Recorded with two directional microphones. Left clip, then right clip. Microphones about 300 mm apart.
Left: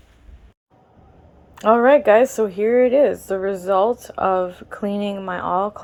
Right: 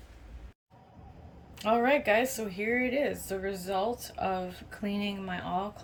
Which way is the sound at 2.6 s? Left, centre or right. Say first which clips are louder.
Left 14 dB; left.